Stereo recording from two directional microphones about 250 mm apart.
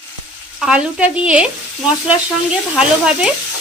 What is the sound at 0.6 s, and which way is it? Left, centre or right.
Speech, centre.